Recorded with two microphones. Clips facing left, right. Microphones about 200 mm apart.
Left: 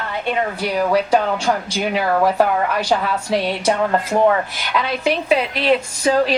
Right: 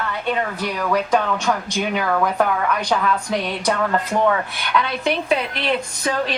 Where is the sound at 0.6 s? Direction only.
30° left (ahead or behind).